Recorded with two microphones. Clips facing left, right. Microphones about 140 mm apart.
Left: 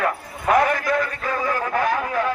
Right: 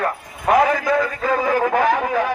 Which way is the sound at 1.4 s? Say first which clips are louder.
Right 4 dB; 90° right.